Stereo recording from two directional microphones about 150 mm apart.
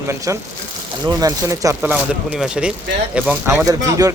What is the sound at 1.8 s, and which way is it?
Speech, 10° right (ahead or behind).